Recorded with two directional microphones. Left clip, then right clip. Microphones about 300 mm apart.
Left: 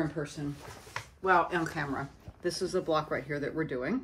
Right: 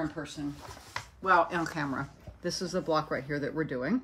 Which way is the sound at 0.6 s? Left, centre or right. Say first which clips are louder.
Right 1 dB; right.